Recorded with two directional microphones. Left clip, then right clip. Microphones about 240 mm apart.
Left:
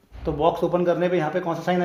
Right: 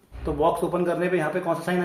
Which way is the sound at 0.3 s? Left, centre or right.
Left.